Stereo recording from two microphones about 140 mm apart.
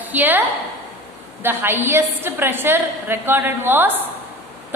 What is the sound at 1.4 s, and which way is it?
A woman's voice, 15° right (ahead or behind).